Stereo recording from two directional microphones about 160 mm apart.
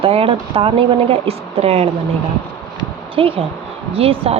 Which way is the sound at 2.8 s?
35° right (ahead or behind).